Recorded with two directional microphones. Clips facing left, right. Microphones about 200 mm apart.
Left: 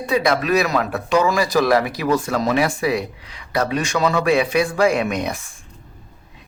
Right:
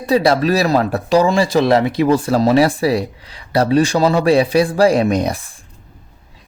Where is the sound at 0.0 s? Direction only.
35° right (ahead or behind).